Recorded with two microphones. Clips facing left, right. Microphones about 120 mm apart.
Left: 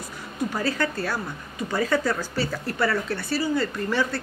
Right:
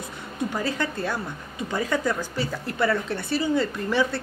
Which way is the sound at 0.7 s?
20° right (ahead or behind).